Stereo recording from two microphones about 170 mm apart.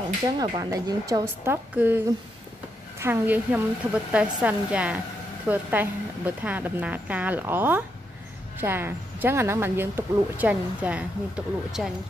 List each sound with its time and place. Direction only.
0.4 s a woman's voice: 20° right (ahead or behind)
3.0 s speech: 10° right (ahead or behind)